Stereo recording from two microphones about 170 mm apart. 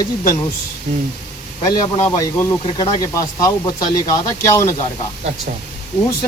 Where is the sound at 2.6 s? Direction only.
30° left (ahead or behind).